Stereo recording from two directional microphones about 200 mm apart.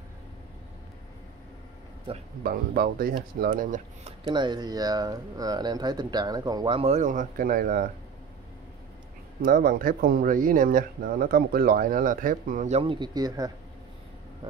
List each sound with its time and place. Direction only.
2.1 s speech: 25° right (ahead or behind)
2.4 s speech: 45° right (ahead or behind)
4.2 s speech: 20° right (ahead or behind); by 7.9 s 45° right (ahead or behind)
9.4 s speech: 45° right (ahead or behind); by 13.5 s 20° right (ahead or behind)